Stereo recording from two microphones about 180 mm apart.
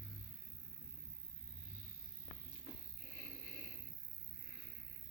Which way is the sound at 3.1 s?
15° right (ahead or behind).